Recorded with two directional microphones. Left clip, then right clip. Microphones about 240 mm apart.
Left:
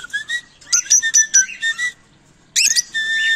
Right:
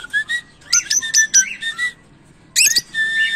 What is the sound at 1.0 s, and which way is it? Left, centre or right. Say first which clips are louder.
Whistle: even; centre.